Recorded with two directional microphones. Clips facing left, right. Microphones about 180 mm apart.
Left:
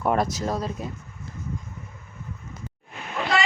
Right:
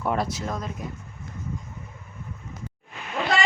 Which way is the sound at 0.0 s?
45° left (ahead or behind).